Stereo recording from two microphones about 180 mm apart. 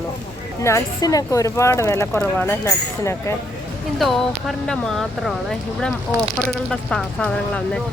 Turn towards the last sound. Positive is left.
turn(degrees=5)  # may be behind; listen again after turning